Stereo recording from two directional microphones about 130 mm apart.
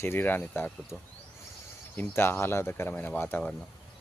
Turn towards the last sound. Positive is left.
turn(degrees=15)  # may be behind; listen again after turning